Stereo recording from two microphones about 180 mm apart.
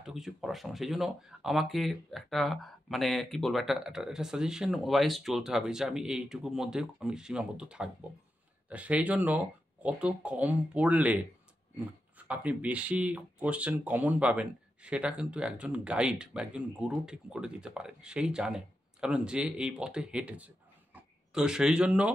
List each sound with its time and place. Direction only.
0.0 s speech: centre (ahead or behind)
12.2 s speech: 10° right (ahead or behind)